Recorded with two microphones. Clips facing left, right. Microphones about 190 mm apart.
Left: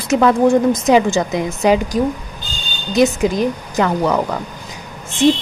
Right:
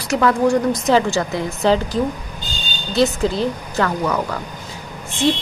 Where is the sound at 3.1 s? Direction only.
15° left (ahead or behind).